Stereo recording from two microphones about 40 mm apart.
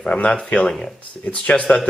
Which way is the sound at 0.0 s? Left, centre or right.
Left.